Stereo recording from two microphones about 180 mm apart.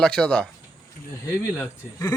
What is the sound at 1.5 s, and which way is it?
Speech, 15° left (ahead or behind).